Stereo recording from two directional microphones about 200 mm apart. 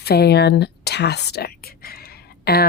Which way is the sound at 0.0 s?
50° left (ahead or behind).